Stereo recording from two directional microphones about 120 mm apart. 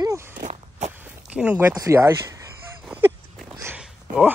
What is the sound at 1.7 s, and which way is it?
Speech, 25° right (ahead or behind).